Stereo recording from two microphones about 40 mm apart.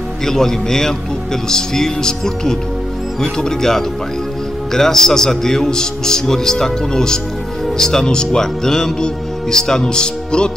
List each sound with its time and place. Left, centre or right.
0.2 s speech: centre